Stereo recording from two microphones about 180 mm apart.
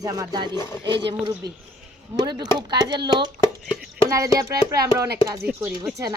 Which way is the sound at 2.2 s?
25° right (ahead or behind).